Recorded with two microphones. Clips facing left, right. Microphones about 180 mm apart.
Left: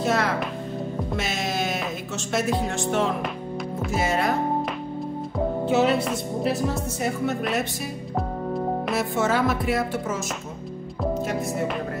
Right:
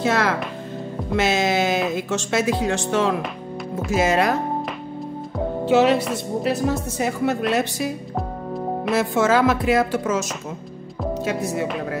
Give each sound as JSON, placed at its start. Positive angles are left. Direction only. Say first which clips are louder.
{"t": 0.0, "sound": "music", "louder": "right 2 dB", "side_deg": -90}
{"t": 2.0, "sound": "speech", "louder": "right 4 dB", "side_deg": -90}
{"t": 5.7, "sound": "speech", "louder": "right 5 dB", "side_deg": -80}
{"t": 7.0, "sound": "speech", "louder": "right 3 dB", "side_deg": -90}
{"t": 8.9, "sound": "speech", "louder": "right 7 dB", "side_deg": -90}